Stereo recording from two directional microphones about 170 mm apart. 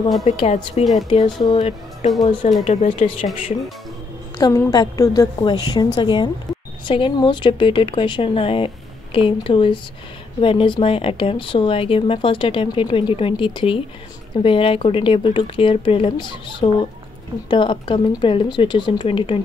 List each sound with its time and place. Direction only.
0.2 s speech: 40° left (ahead or behind)
1.0 s speech: 30° left (ahead or behind)
1.6 s a woman's voice: 40° left (ahead or behind)
4.4 s speech: 20° left (ahead or behind)